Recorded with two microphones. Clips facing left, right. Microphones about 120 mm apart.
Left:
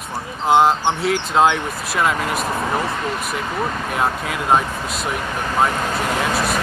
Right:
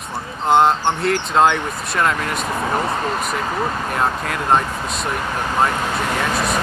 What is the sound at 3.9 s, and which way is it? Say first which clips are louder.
Speech: left 1 dB; 5° left (ahead or behind).